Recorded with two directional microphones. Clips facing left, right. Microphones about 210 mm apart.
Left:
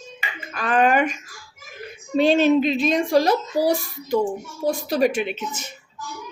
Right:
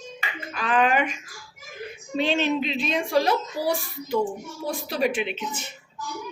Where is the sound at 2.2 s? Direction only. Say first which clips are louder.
Left 7 dB; 40° left (ahead or behind).